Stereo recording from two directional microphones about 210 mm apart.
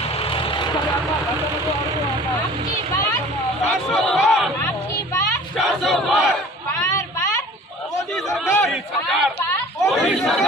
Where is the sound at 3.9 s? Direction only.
Centre (ahead or behind).